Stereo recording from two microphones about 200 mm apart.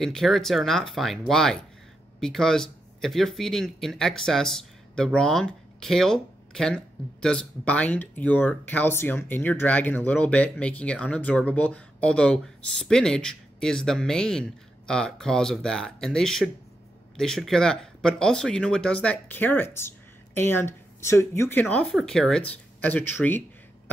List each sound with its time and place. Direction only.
0.0 s speech: centre (ahead or behind)